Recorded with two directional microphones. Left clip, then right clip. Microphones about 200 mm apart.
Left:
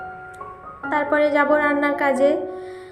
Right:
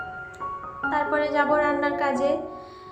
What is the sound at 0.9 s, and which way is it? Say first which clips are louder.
A woman's voice: left 5 dB; 20° left (ahead or behind).